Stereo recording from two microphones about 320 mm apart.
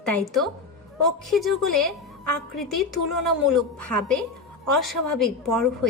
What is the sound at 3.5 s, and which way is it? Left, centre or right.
A woman's voice, centre.